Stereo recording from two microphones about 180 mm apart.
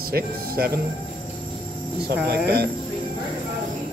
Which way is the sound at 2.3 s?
60° right (ahead or behind).